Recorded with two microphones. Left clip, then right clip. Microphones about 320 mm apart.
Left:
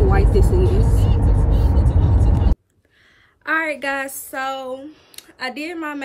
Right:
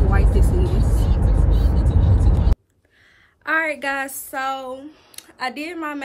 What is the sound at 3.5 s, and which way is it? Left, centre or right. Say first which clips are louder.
A woman's voice: even; centre.